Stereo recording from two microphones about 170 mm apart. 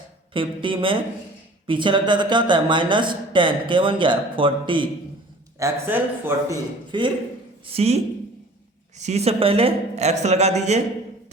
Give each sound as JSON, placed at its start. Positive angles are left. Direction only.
{"t": 0.3, "sound": "a man's voice", "side_deg": -30}
{"t": 5.5, "sound": "speech", "side_deg": -15}
{"t": 6.9, "sound": "a man's voice", "side_deg": -25}